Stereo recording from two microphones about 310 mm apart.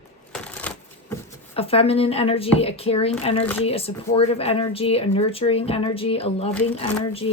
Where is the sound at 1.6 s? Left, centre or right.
Centre.